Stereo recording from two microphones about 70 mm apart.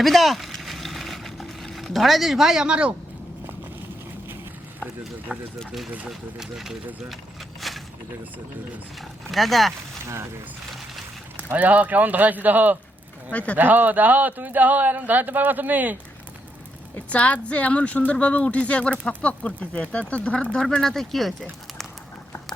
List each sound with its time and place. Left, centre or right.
0.0 s a sound: centre
4.8 s speech: centre
7.6 s a sound: centre
9.0 s speech: centre
11.5 s speech: right
13.3 s speech: left
13.6 s speech: right
17.1 s speech: centre